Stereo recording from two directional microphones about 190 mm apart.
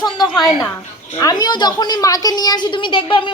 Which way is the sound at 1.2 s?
20° left (ahead or behind).